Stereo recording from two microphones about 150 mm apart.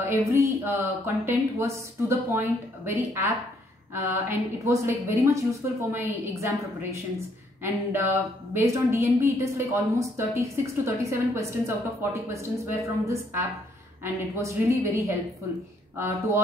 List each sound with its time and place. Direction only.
0.1 s a woman's voice: 20° right (ahead or behind)